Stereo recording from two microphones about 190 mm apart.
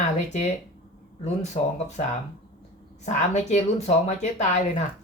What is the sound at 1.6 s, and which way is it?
Speech, 35° left (ahead or behind).